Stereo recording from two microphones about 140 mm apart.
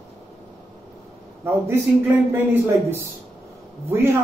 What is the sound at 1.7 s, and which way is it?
Speech, 15° right (ahead or behind).